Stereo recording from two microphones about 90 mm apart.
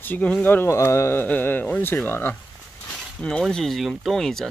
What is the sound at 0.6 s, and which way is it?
Speech, 30° left (ahead or behind).